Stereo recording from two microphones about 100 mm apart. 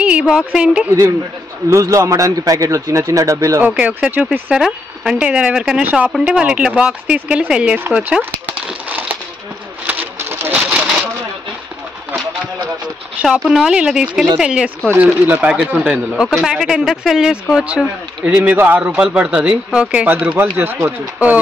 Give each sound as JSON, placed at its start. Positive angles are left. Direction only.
{"t": 0.0, "sound": "a woman's voice", "side_deg": -10}
{"t": 1.7, "sound": "a man's voice", "side_deg": -35}
{"t": 3.6, "sound": "speech", "side_deg": -10}
{"t": 8.6, "sound": "a sound", "side_deg": -15}
{"t": 9.8, "sound": "pigeon", "side_deg": -15}
{"t": 10.6, "sound": "a sound", "side_deg": -10}
{"t": 13.5, "sound": "speech", "side_deg": -5}
{"t": 15.2, "sound": "speech", "side_deg": -20}